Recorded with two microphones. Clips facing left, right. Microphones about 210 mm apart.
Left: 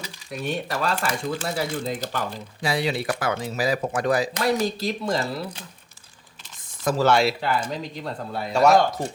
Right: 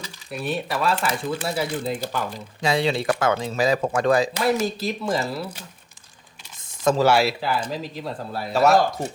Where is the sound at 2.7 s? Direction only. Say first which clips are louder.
Right 3 dB; 25° right (ahead or behind).